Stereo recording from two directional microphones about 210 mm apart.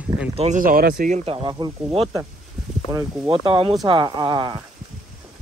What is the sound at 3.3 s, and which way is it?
Speech, 25° right (ahead or behind).